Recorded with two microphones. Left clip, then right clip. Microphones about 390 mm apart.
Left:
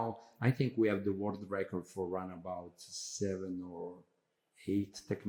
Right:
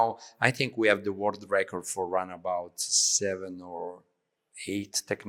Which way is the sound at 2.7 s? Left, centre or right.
Right.